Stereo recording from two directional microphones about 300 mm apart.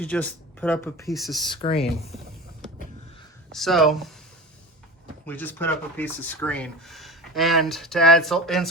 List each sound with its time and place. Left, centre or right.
0.0 s speech: centre
1.5 s speech: centre
3.5 s speech: centre
5.2 s speech: centre